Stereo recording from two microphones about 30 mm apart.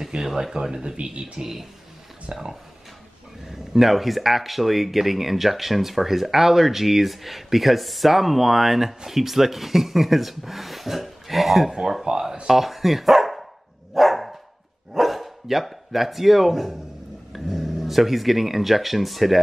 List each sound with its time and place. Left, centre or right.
0.0 s speech: centre
1.0 s speech: right
1.4 s speech: centre
2.3 s speech: right
3.4 s a sound: centre
3.8 s speech: centre
11.7 s speech: centre
12.4 s speech: centre
13.9 s dog: centre
15.0 s speech: centre